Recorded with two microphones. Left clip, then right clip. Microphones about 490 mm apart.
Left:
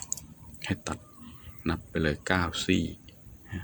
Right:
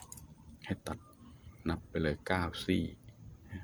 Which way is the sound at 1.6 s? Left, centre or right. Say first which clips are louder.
Left 5 dB; right.